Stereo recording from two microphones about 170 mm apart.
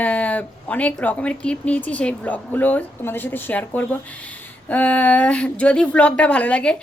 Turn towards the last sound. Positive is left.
turn(degrees=5)  # may be behind; listen again after turning